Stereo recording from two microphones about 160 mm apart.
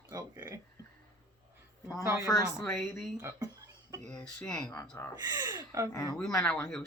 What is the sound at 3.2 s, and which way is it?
Speech, 20° right (ahead or behind).